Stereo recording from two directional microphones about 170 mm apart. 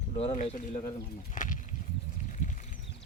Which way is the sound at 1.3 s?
50° left (ahead or behind).